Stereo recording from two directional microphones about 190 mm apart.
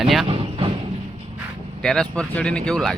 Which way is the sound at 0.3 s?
25° right (ahead or behind).